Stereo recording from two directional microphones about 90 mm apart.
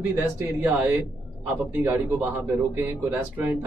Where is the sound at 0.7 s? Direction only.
15° right (ahead or behind).